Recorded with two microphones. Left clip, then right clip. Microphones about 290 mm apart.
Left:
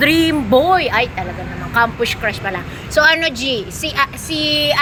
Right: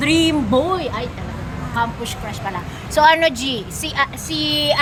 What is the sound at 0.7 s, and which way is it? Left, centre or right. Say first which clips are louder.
A woman's voice: left 9 dB; centre.